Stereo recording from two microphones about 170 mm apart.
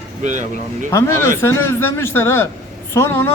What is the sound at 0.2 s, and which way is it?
Speech, 45° right (ahead or behind).